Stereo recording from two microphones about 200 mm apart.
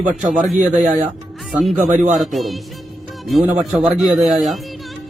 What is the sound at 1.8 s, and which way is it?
Speech, 40° right (ahead or behind).